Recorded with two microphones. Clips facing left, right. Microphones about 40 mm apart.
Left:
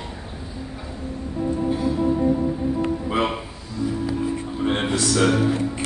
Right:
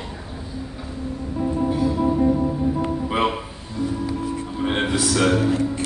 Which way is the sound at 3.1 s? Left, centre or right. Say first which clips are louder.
Right 2 dB; centre.